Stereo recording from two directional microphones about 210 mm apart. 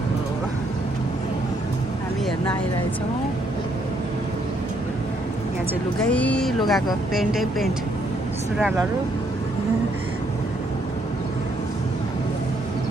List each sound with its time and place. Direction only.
6.1 s speech: 5° left (ahead or behind)